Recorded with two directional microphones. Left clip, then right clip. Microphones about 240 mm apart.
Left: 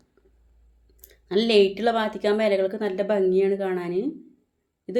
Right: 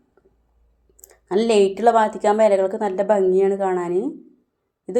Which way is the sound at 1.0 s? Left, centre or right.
Centre.